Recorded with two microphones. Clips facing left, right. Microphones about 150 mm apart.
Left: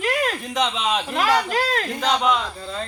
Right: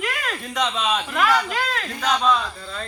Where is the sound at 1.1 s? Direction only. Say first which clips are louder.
Left 1 dB; 30° left (ahead or behind).